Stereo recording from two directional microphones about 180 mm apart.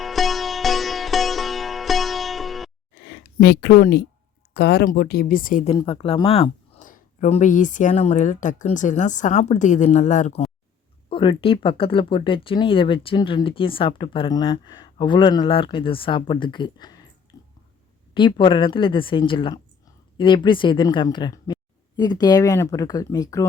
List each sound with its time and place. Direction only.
0.0 s sitar: centre (ahead or behind)
3.3 s speech: 65° left (ahead or behind)
5.7 s speech: 30° left (ahead or behind)
6.7 s speech: 45° left (ahead or behind); by 16.9 s 25° left (ahead or behind)
17.3 s a sound: 20° left (ahead or behind)
18.1 s speech: 25° left (ahead or behind)